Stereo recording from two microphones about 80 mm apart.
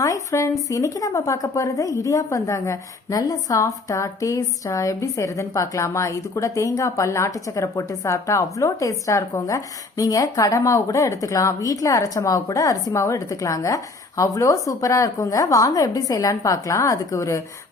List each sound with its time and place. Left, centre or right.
0.0 s speech: left